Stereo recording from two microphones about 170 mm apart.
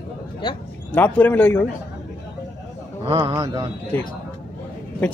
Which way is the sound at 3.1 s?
25° right (ahead or behind).